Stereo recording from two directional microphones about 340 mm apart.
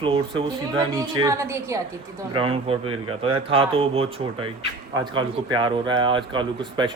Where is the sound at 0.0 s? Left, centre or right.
Centre.